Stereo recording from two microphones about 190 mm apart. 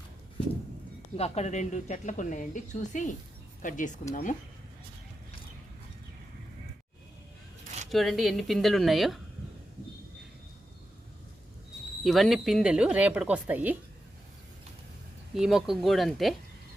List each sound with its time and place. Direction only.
1.1 s speech: 35° left (ahead or behind)
7.9 s speech: centre (ahead or behind)
12.0 s speech: centre (ahead or behind)
15.4 s speech: centre (ahead or behind)